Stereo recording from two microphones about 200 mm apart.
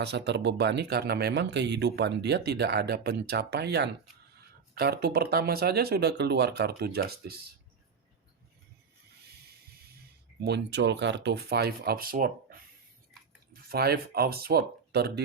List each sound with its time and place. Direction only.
0.0 s speech: 60° right (ahead or behind)
10.4 s speech: 60° right (ahead or behind)